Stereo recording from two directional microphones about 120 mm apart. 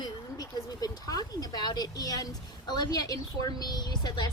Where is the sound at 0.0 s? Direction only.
30° left (ahead or behind).